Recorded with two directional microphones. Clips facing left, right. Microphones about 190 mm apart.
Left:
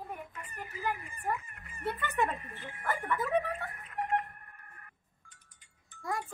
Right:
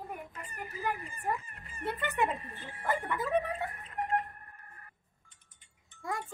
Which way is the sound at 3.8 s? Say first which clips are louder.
Left 2 dB; 30° right (ahead or behind).